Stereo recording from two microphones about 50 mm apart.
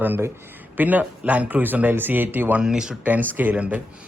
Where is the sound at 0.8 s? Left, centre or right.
Right.